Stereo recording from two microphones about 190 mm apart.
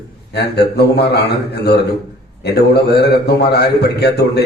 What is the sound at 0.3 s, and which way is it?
A man's voice, 60° left (ahead or behind).